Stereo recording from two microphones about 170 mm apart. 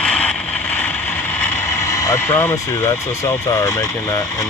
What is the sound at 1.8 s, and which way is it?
Speech, 20° left (ahead or behind).